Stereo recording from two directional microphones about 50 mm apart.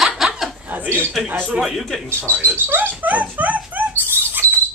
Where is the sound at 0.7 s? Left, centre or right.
Right.